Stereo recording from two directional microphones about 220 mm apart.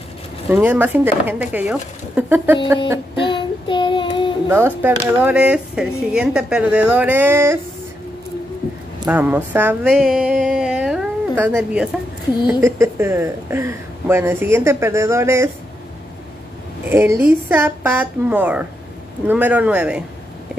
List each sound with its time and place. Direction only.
0.5 s a woman's voice: 10° right (ahead or behind)
3.3 s child singing: 20° left (ahead or behind)
4.5 s speech: 10° right (ahead or behind)
9.0 s a sound: 10° right (ahead or behind)
12.4 s a woman's voice: 10° right (ahead or behind)
16.9 s a woman's voice: 10° right (ahead or behind)